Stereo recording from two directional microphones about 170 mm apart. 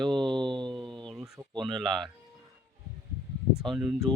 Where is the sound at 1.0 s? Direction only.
5° right (ahead or behind).